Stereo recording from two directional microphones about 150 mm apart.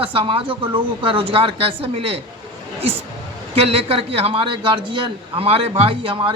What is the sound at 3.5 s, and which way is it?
Speech, 40° right (ahead or behind).